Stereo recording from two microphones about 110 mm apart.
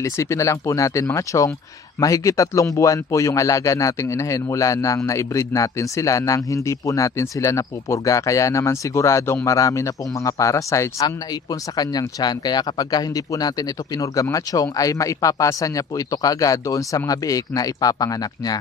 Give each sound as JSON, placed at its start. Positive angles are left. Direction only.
{"t": 0.0, "sound": "speech", "side_deg": 25}